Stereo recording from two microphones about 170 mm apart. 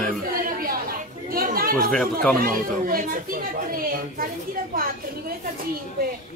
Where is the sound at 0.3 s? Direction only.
60° right (ahead or behind).